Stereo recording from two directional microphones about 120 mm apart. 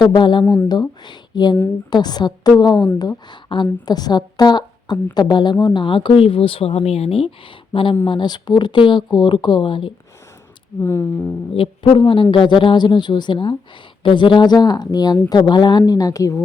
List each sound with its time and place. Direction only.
0.0 s a woman's voice: 40° left (ahead or behind)
10.8 s speech: 20° left (ahead or behind)
11.5 s a woman's voice: 45° left (ahead or behind); by 16.4 s 25° left (ahead or behind)